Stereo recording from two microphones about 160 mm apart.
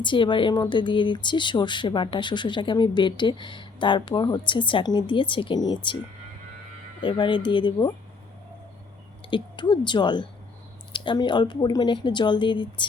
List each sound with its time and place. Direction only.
0.0 s speech: 30° left (ahead or behind)
7.0 s speech: 30° left (ahead or behind)
9.3 s speech: 30° left (ahead or behind)